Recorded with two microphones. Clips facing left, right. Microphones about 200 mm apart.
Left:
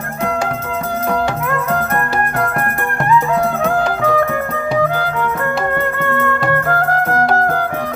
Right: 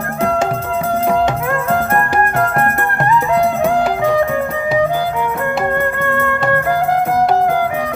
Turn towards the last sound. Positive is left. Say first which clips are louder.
# right 2 dB
turn(degrees=-10)  # may be behind; listen again after turning